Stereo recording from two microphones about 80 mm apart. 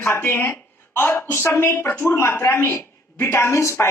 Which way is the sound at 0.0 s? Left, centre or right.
Left.